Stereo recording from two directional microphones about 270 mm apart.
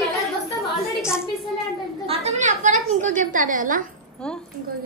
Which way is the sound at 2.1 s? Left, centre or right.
Right.